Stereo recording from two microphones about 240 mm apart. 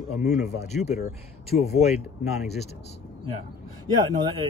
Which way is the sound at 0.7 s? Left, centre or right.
Left.